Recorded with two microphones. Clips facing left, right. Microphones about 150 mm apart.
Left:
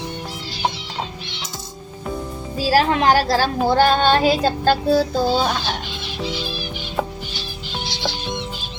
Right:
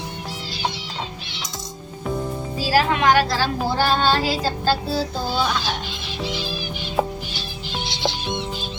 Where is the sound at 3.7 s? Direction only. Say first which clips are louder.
Left 5 dB; 55° left (ahead or behind).